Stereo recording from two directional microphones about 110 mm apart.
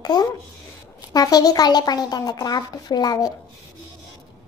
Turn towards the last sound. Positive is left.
turn(degrees=35)  # may be behind; listen again after turning